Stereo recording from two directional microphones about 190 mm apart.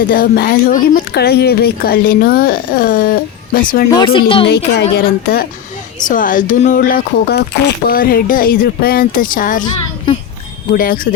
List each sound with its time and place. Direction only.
0.1 s speech: 50° left (ahead or behind)
3.9 s speech: 25° left (ahead or behind)
4.4 s a woman's voice: 60° left (ahead or behind)
6.0 s speech: 45° left (ahead or behind)
10.7 s speech: 45° left (ahead or behind)